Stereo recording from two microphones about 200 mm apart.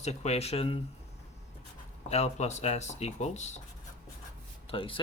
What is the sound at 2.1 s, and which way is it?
Speech, 35° left (ahead or behind).